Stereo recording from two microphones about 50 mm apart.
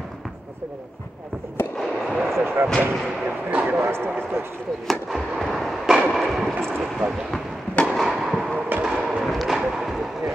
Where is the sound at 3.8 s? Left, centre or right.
Right.